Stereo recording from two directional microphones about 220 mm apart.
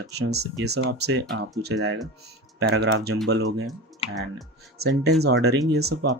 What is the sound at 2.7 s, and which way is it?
Speech, 50° right (ahead or behind).